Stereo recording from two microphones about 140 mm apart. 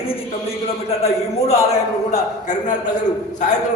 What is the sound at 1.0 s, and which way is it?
A man's voice, 50° left (ahead or behind).